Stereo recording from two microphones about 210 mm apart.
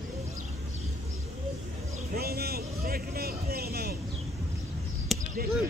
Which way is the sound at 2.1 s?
45° right (ahead or behind).